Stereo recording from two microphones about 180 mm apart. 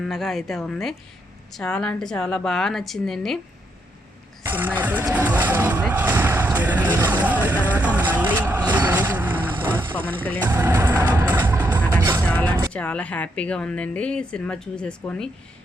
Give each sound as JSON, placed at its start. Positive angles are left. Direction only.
{"t": 0.0, "sound": "a woman's voice", "side_deg": 0}
{"t": 4.5, "sound": "vehicle", "side_deg": -10}
{"t": 10.0, "sound": "a woman's voice", "side_deg": 10}
{"t": 10.4, "sound": "vehicle", "side_deg": -15}
{"t": 12.2, "sound": "music", "side_deg": 10}
{"t": 12.7, "sound": "a woman's voice", "side_deg": 5}